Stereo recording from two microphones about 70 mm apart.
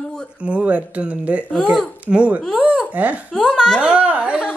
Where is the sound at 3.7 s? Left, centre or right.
Centre.